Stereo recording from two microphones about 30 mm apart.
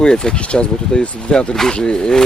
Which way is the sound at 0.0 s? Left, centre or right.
Left.